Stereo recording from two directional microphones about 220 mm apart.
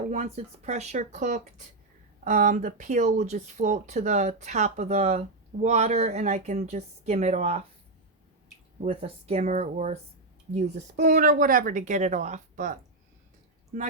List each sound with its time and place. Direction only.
0.1 s speech: 30° right (ahead or behind)
8.8 s speech: 25° right (ahead or behind)